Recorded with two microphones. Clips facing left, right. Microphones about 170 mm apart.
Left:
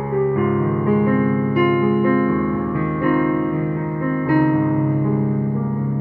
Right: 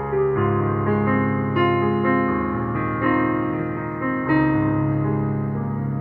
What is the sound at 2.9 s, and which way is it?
Music, 30° left (ahead or behind).